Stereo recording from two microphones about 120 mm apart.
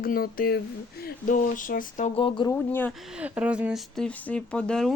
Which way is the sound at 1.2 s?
90° left.